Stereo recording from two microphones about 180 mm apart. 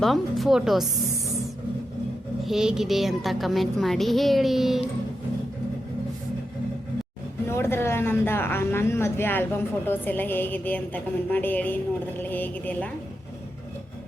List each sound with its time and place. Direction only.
0.0 s a woman's voice: centre (ahead or behind)
2.4 s a woman's voice: centre (ahead or behind)
7.4 s a woman's voice: 15° left (ahead or behind)